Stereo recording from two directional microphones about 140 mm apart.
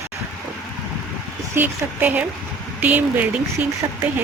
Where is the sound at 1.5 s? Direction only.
10° right (ahead or behind).